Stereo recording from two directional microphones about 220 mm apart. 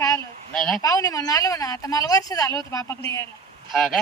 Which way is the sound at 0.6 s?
Centre (ahead or behind).